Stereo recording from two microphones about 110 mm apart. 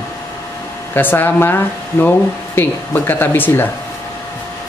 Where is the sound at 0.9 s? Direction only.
20° left (ahead or behind).